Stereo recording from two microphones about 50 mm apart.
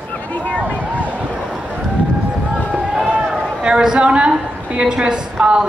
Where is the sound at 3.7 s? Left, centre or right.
Centre.